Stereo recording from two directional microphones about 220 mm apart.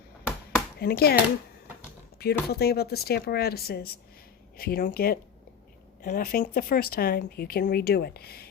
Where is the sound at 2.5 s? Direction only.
45° left (ahead or behind).